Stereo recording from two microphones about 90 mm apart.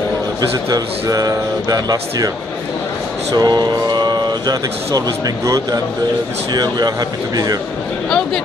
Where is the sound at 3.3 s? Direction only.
50° right (ahead or behind).